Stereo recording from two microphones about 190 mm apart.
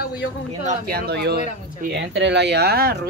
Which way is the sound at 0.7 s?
50° right (ahead or behind).